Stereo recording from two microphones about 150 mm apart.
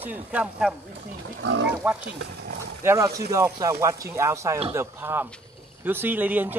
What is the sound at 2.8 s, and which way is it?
Speech, 20° right (ahead or behind).